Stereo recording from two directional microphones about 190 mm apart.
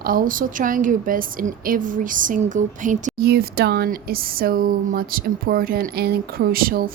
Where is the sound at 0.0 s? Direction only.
50° right (ahead or behind).